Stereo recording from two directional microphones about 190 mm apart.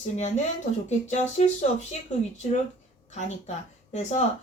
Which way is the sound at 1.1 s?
40° left (ahead or behind).